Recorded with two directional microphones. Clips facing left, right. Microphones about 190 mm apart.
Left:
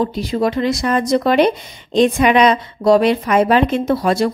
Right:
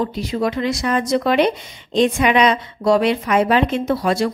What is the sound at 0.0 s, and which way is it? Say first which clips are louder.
A woman's voice: left 3 dB; 35° left (ahead or behind).